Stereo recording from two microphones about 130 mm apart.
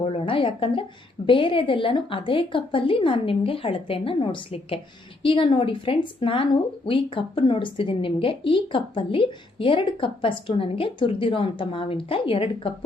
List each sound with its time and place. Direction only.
0.0 s speech: 45° left (ahead or behind)